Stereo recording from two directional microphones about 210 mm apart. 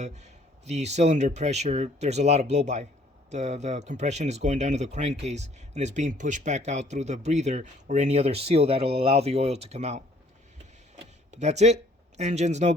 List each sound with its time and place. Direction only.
0.0 s speech: 30° right (ahead or behind)
11.3 s speech: 35° right (ahead or behind)